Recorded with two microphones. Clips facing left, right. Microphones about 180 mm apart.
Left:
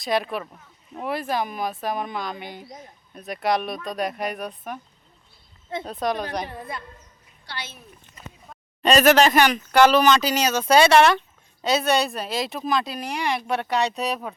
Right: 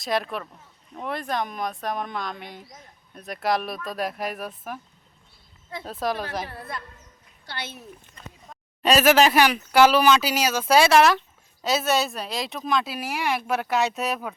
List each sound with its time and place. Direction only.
0.0 s speech: centre (ahead or behind)
5.8 s speech: centre (ahead or behind)
7.4 s a woman's voice: 50° right (ahead or behind)
8.2 s speech: 5° left (ahead or behind)
8.8 s speech: 5° right (ahead or behind)